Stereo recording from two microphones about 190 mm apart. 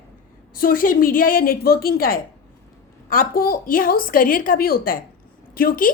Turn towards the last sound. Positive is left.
turn(degrees=50)  # may be behind; listen again after turning